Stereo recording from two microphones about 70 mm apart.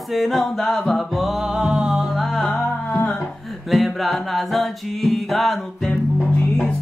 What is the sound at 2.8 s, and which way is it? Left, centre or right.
Music, left.